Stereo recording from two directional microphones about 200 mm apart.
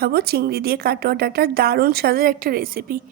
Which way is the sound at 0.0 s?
50° right (ahead or behind).